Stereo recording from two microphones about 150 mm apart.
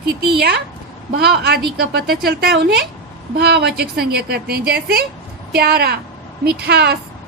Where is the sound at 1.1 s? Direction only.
90° right.